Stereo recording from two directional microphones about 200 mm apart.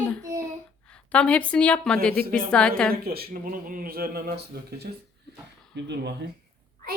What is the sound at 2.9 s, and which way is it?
Speech, 50° right (ahead or behind).